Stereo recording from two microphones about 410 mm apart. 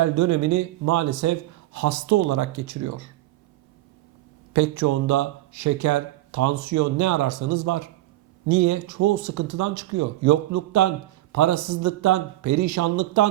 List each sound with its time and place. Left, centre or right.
0.0 s speech: right
4.5 s speech: right